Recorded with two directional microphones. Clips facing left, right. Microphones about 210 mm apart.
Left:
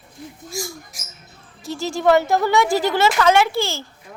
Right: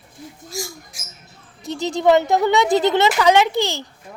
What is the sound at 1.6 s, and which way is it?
A woman's voice, 20° right (ahead or behind).